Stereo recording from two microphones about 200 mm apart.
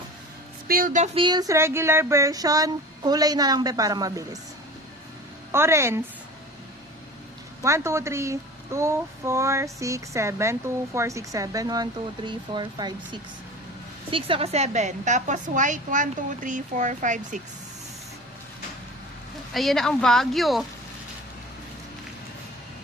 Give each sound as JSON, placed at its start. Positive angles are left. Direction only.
{"t": 0.7, "sound": "a sound", "side_deg": -45}
{"t": 5.5, "sound": "a woman's voice", "side_deg": -15}
{"t": 7.6, "sound": "a woman's voice", "side_deg": -15}
{"t": 14.1, "sound": "a woman's voice", "side_deg": -25}
{"t": 19.5, "sound": "speech", "side_deg": 0}